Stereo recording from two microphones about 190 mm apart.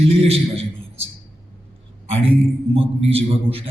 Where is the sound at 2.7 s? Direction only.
30° right (ahead or behind).